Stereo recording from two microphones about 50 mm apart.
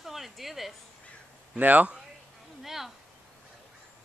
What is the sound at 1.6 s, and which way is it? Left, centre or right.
Speech, right.